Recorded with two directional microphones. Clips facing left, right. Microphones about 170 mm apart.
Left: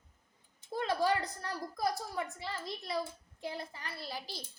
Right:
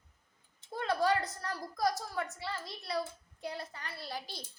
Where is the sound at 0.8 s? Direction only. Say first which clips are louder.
Right 1 dB; 20° left (ahead or behind).